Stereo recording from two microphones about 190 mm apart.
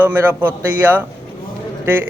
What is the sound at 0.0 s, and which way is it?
A man's voice, 10° right (ahead or behind).